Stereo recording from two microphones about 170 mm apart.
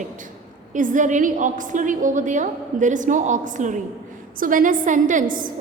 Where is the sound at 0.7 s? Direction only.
50° right (ahead or behind).